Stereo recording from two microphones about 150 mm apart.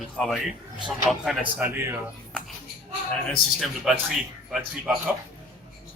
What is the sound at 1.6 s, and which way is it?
Speech, 15° right (ahead or behind).